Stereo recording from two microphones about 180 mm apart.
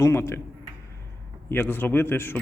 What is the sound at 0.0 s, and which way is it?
Speech, 15° left (ahead or behind).